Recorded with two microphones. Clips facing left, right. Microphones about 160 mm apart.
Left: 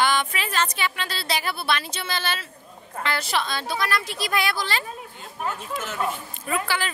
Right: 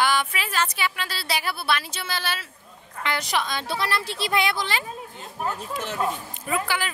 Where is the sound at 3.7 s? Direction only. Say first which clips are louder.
Left 1 dB; 30° right (ahead or behind).